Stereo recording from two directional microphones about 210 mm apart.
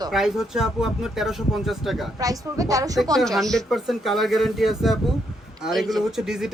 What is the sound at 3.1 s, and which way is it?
Speech, centre (ahead or behind).